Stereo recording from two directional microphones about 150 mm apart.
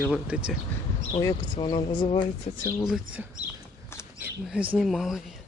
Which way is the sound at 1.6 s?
30° left (ahead or behind).